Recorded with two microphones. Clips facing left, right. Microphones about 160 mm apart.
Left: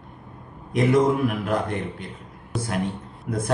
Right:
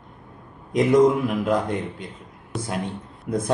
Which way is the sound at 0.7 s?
20° right (ahead or behind).